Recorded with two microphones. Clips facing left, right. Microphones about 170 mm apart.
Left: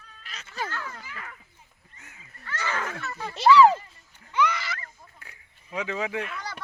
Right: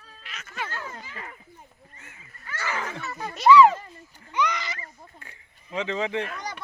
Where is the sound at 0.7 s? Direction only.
20° right (ahead or behind).